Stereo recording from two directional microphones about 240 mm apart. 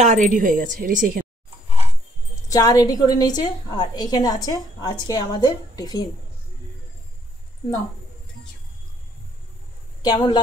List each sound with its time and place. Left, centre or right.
0.0 s a woman's voice: right
2.4 s a woman's voice: centre
10.0 s a woman's voice: centre